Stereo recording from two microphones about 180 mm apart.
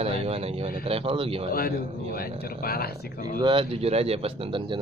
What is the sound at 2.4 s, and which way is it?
Speech, 55° left (ahead or behind).